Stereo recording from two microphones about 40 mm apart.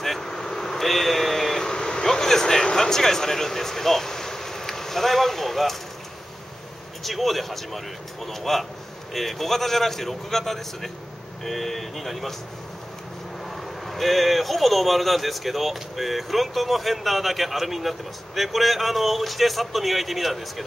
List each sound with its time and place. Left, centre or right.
0.0 s vehicle: centre
1.7 s speech: centre
7.0 s a man's voice: centre
13.8 s a man's voice: centre